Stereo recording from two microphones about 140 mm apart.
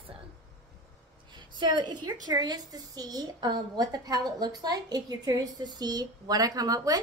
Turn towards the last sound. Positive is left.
turn(degrees=-25)  # may be behind; listen again after turning